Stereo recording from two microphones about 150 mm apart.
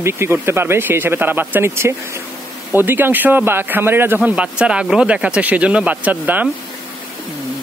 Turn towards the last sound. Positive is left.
turn(degrees=-10)  # may be behind; listen again after turning